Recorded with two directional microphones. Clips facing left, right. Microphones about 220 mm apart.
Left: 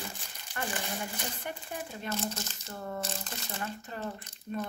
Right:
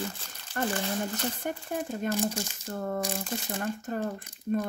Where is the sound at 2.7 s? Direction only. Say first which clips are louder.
Right 6 dB; 50° right (ahead or behind).